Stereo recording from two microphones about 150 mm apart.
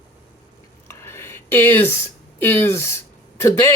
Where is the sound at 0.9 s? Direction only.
15° left (ahead or behind).